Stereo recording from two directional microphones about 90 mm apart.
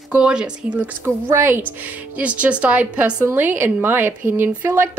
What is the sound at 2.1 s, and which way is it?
Speech, 15° right (ahead or behind).